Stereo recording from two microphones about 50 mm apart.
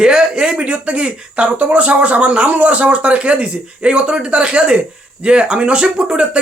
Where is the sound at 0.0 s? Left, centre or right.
Centre.